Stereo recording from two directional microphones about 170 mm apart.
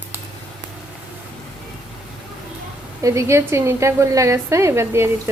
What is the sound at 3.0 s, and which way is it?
A woman's voice, 15° right (ahead or behind).